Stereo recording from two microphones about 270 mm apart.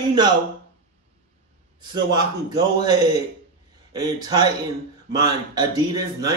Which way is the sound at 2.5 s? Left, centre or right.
Centre.